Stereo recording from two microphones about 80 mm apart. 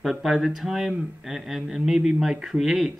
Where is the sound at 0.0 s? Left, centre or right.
Centre.